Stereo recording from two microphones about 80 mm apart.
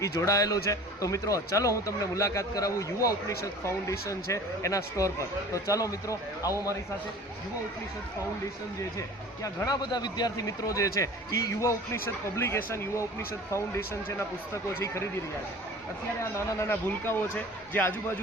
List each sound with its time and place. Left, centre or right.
0.0 s a man's voice: left
9.6 s a man's voice: left
16.6 s a man's voice: left